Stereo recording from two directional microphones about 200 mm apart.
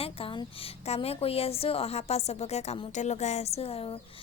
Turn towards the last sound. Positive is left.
turn(degrees=30)  # may be behind; listen again after turning